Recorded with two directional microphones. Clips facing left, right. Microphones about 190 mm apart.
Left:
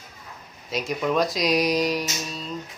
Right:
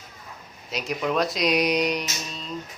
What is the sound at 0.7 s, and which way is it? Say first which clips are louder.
Speech: left 2 dB; centre (ahead or behind).